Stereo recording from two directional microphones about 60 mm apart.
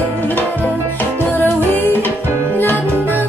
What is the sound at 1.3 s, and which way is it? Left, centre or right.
Music, left.